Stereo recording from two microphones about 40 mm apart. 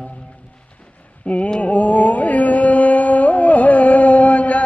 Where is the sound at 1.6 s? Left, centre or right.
Left.